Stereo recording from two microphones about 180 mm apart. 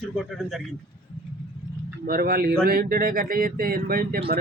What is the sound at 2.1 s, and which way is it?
Speech, 55° right (ahead or behind).